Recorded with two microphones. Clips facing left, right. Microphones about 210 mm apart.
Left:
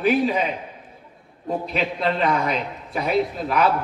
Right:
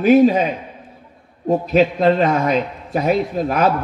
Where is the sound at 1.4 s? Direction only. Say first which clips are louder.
Right 10 dB; 45° right (ahead or behind).